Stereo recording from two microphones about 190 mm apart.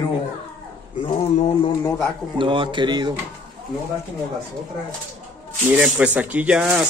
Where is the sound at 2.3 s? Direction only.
25° right (ahead or behind).